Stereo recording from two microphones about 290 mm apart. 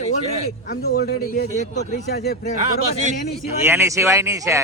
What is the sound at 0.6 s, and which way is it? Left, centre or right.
A man's voice, left.